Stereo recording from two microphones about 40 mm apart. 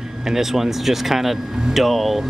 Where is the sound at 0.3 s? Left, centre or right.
Centre.